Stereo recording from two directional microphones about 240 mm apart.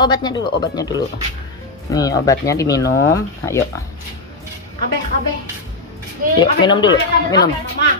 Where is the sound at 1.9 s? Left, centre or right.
Centre.